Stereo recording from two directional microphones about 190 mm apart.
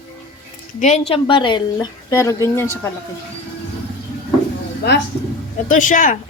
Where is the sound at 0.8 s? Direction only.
35° left (ahead or behind).